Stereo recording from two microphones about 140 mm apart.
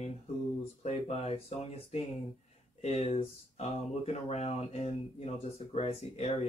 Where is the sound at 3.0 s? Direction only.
45° left (ahead or behind).